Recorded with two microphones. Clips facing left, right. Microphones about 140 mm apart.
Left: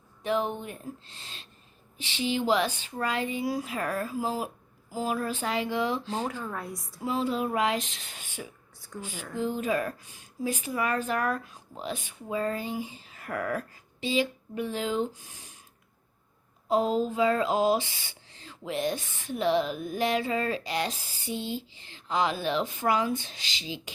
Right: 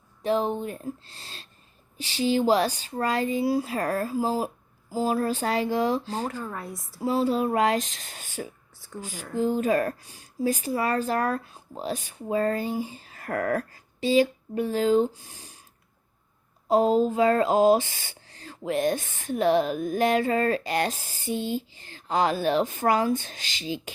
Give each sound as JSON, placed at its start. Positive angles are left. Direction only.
{"t": 0.2, "sound": "speech", "side_deg": -35}
{"t": 6.2, "sound": "a woman's voice", "side_deg": -5}
{"t": 7.0, "sound": "speech", "side_deg": -35}
{"t": 9.1, "sound": "a woman's voice", "side_deg": -5}
{"t": 9.4, "sound": "speech", "side_deg": -40}
{"t": 16.6, "sound": "speech", "side_deg": -45}